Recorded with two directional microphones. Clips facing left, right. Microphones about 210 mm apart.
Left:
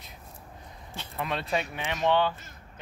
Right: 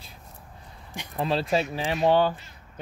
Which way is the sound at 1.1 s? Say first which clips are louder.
Right 5 dB; 30° right (ahead or behind).